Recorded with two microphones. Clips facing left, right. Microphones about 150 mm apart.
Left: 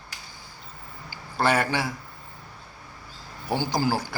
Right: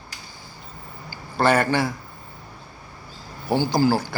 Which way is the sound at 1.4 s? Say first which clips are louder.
Right 4 dB; 10° left (ahead or behind).